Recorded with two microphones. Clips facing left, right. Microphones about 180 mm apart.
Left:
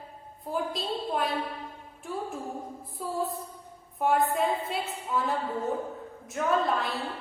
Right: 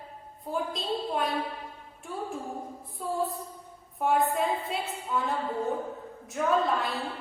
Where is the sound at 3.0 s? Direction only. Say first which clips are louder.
Right 1 dB; 5° left (ahead or behind).